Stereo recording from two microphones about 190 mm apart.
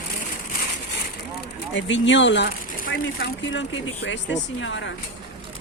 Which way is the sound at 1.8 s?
75° left (ahead or behind).